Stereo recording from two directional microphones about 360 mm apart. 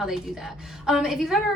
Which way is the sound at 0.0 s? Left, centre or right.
Centre.